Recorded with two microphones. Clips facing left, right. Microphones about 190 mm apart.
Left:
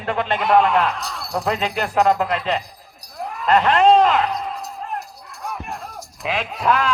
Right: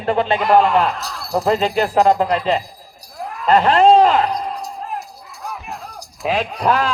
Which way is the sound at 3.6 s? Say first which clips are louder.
Right 3 dB; 35° right (ahead or behind).